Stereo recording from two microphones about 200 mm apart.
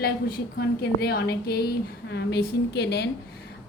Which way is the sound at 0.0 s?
50° left (ahead or behind).